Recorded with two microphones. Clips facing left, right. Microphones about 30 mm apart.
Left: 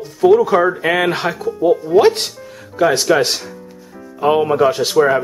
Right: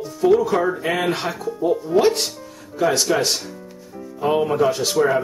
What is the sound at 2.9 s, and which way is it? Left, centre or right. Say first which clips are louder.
Speech: left 3 dB; left.